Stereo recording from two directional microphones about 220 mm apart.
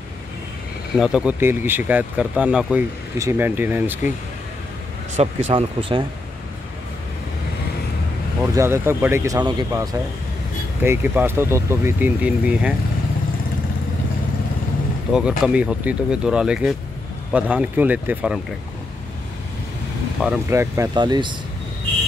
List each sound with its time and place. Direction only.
0.9 s speech: 5° right (ahead or behind)
5.1 s speech: 30° right (ahead or behind)
8.4 s speech: 10° right (ahead or behind)
15.1 s speech: 5° right (ahead or behind)
20.2 s speech: 5° right (ahead or behind)